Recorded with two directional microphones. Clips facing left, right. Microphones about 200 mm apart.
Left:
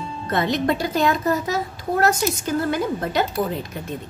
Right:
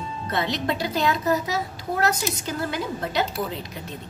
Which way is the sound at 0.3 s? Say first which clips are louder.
Left 5 dB; 50° left (ahead or behind).